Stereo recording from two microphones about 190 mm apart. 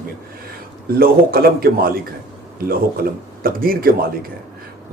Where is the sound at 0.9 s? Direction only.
50° right (ahead or behind).